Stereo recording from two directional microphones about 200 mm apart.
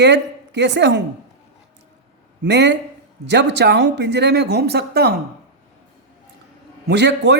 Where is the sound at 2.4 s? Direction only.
60° right (ahead or behind).